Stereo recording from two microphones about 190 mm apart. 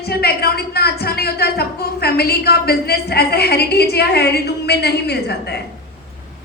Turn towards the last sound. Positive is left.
turn(degrees=60)  # may be behind; listen again after turning